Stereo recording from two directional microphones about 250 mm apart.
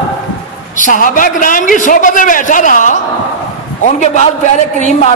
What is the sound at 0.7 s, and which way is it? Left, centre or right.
A man's voice, left.